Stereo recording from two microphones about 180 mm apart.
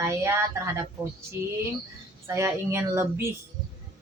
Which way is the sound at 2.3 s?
15° right (ahead or behind).